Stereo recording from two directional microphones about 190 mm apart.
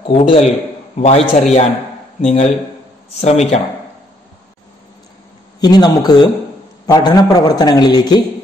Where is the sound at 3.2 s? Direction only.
35° left (ahead or behind).